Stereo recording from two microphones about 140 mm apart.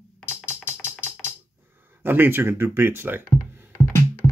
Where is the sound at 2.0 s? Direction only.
15° right (ahead or behind).